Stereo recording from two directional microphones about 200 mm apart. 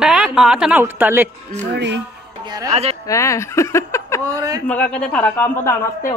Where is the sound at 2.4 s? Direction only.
20° right (ahead or behind).